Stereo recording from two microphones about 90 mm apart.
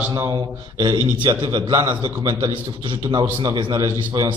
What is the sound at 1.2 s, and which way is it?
A man's voice, 60° right (ahead or behind).